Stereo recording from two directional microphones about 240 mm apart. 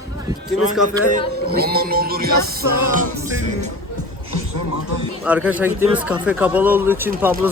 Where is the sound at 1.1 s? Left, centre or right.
Right.